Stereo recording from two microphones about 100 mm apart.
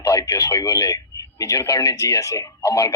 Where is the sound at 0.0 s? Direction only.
30° left (ahead or behind).